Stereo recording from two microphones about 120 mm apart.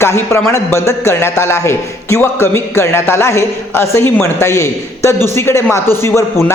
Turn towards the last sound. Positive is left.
turn(degrees=20)  # may be behind; listen again after turning